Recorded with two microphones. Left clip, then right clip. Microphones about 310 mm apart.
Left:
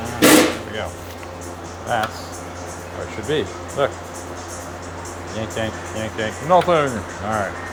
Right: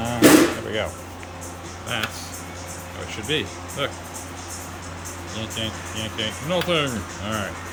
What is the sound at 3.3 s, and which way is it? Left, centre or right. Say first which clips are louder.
Speech: left 4 dB; centre.